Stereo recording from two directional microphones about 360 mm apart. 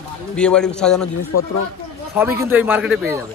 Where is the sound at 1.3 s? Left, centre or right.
Left.